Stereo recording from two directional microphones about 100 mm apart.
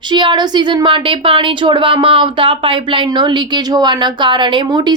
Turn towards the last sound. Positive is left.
turn(degrees=-45)  # may be behind; listen again after turning